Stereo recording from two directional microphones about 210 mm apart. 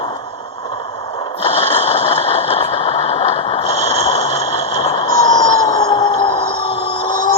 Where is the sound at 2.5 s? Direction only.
25° left (ahead or behind).